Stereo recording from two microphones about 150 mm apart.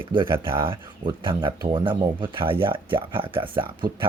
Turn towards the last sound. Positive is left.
turn(degrees=-35)  # may be behind; listen again after turning